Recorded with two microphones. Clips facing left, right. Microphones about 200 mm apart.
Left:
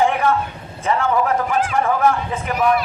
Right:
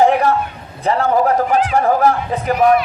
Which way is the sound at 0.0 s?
35° right (ahead or behind).